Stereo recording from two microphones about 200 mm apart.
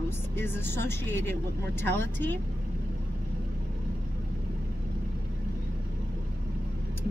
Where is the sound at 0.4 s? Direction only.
10° left (ahead or behind).